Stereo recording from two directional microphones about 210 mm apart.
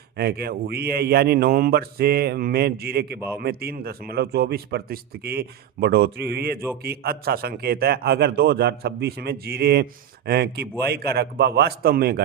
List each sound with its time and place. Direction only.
0.2 s a man's voice: 50° right (ahead or behind)